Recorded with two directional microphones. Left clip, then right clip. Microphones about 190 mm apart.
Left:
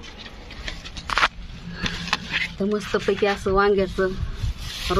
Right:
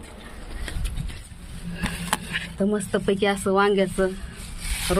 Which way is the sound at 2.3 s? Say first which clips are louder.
Left 2 dB; 15° right (ahead or behind).